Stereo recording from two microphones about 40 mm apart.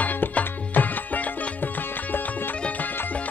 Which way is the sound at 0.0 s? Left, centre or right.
Left.